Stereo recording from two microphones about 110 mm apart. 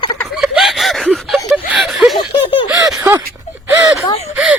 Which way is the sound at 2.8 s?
30° right (ahead or behind).